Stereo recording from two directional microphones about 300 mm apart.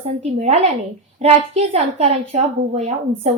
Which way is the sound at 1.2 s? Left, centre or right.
Right.